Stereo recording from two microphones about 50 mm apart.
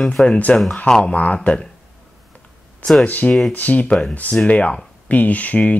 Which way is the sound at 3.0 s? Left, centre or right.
Left.